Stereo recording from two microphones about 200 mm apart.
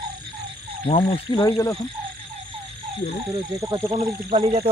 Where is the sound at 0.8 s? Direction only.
25° left (ahead or behind).